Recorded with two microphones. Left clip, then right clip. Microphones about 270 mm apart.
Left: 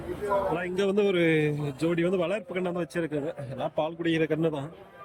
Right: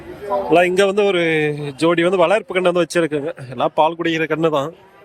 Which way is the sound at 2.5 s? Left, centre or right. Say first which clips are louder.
Right 14 dB; centre.